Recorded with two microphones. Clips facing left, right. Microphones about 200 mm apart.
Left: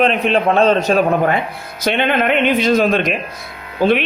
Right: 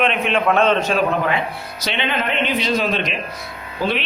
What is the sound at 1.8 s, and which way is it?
A man's voice, 50° left (ahead or behind).